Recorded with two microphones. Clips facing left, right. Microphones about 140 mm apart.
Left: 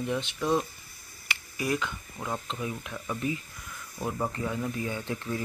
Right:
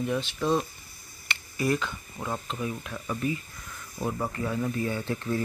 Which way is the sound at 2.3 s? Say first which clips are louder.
Right 1 dB; centre (ahead or behind).